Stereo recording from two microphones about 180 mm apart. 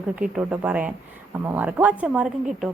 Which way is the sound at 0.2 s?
5° right (ahead or behind).